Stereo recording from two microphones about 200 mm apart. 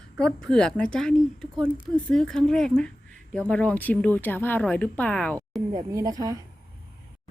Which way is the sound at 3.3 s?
5° left (ahead or behind).